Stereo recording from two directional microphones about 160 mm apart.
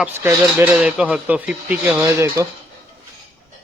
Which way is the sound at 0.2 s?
10° right (ahead or behind).